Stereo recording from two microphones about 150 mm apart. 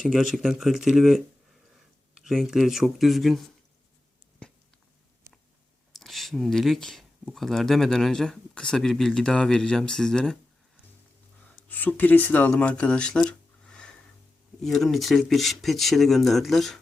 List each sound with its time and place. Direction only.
0.0 s speech: centre (ahead or behind)
6.0 s speech: centre (ahead or behind)
11.7 s speech: 10° left (ahead or behind)
13.7 s music: 5° left (ahead or behind)
14.6 s speech: centre (ahead or behind)